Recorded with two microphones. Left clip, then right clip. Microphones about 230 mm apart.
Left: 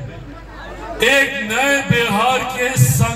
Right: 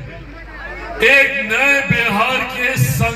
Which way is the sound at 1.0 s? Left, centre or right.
Left.